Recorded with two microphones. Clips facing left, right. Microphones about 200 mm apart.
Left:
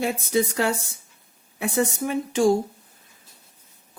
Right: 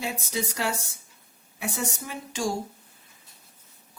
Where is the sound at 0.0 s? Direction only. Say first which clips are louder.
Left 8 dB; 55° left (ahead or behind).